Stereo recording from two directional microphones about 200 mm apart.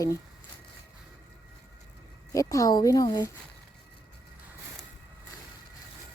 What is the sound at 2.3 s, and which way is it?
Speech, 15° left (ahead or behind).